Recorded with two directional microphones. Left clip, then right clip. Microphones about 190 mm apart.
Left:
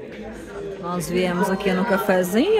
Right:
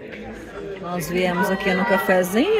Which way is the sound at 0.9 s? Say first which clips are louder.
Right 1 dB; 5° left (ahead or behind).